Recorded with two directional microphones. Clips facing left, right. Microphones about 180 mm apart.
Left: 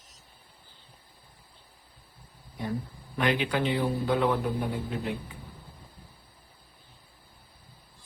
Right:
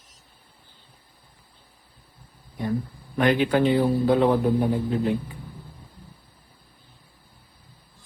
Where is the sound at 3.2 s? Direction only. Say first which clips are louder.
Right 7 dB; 45° right (ahead or behind).